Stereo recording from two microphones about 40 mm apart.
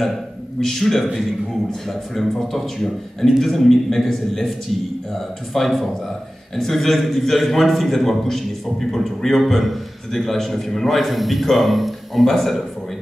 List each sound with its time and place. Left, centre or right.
0.6 s a man's voice: centre